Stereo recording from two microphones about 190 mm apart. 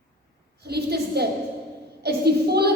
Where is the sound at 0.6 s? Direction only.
60° right (ahead or behind).